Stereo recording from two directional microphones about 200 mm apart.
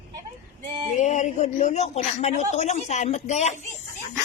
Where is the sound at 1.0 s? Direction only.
35° left (ahead or behind).